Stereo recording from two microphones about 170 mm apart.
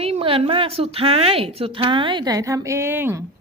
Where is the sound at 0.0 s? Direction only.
35° right (ahead or behind).